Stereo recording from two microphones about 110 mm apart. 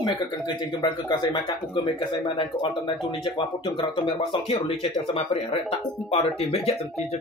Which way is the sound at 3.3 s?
50° left (ahead or behind).